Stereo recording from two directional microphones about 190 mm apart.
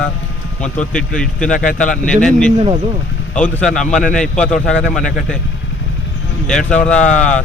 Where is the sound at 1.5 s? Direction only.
45° left (ahead or behind).